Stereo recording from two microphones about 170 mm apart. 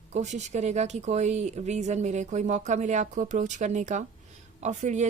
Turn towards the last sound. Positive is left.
turn(degrees=-45)  # may be behind; listen again after turning